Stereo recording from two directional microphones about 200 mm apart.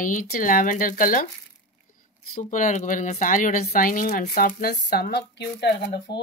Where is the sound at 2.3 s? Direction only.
40° left (ahead or behind); by 6.2 s 55° left (ahead or behind).